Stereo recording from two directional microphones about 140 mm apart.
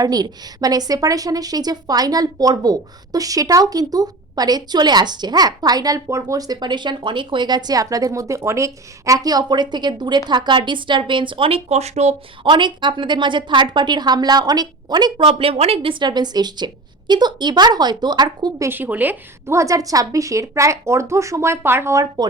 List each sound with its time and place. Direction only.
0.0 s a woman's voice: 25° right (ahead or behind); by 12.1 s 50° right (ahead or behind)
12.4 s a woman's voice: 35° right (ahead or behind)
15.2 s a woman's voice: 40° right (ahead or behind)
18.7 s a woman's voice: 15° right (ahead or behind)